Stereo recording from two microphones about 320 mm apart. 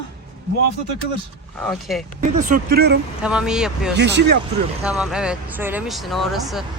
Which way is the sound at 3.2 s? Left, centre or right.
Centre.